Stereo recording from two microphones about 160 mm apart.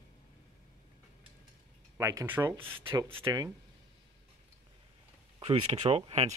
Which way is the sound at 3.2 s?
25° right (ahead or behind).